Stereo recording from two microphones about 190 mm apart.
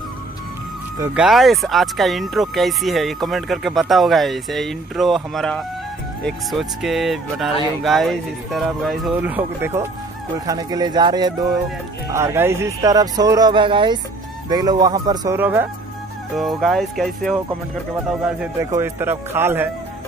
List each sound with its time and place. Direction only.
1.1 s speech: centre (ahead or behind)
16.3 s speech: centre (ahead or behind)
18.6 s speech: 15° right (ahead or behind)